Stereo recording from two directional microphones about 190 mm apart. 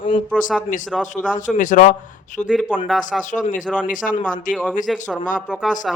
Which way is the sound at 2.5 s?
Centre (ahead or behind).